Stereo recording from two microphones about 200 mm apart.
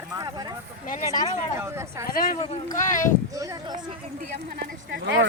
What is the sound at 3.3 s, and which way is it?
Speech, 15° right (ahead or behind).